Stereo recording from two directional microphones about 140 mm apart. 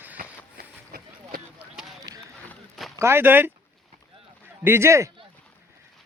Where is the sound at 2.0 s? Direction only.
25° right (ahead or behind).